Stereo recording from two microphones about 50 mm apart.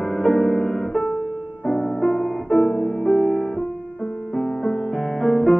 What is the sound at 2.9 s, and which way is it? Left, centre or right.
Music, centre.